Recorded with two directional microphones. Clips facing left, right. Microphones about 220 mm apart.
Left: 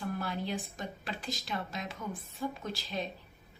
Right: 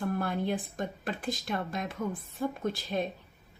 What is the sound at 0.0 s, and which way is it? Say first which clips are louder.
A woman's voice: right 5 dB; 55° right (ahead or behind).